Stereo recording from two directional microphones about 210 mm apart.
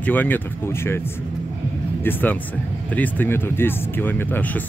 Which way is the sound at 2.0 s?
10° left (ahead or behind).